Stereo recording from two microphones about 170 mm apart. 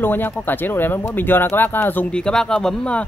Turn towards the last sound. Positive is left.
turn(degrees=5)  # may be behind; listen again after turning